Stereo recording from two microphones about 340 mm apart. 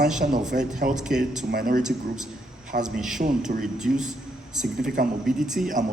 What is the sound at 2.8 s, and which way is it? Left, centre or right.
A man's voice, centre.